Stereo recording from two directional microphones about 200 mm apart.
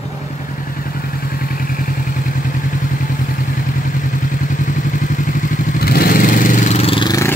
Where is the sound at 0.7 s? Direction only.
45° left (ahead or behind).